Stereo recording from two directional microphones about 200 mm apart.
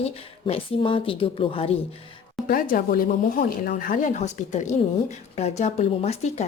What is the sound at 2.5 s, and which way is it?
Speech, 45° left (ahead or behind).